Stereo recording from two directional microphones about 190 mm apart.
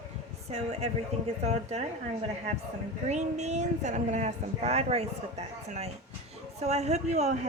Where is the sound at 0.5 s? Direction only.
35° right (ahead or behind).